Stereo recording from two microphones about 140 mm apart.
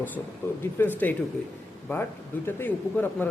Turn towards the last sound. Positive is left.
turn(degrees=15)  # may be behind; listen again after turning